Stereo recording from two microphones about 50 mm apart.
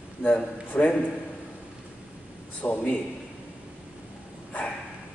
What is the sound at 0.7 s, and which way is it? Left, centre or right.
Speech, left.